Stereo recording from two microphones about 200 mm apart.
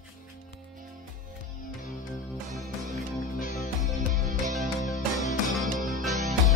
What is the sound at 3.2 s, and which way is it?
Music, 45° left (ahead or behind).